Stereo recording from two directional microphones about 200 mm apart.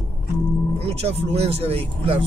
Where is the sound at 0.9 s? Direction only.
30° right (ahead or behind).